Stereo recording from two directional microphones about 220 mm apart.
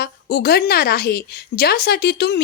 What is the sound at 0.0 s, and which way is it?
A woman's voice, 45° left (ahead or behind).